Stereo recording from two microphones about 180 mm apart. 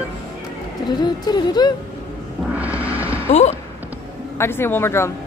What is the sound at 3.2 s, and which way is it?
Speech, 35° left (ahead or behind).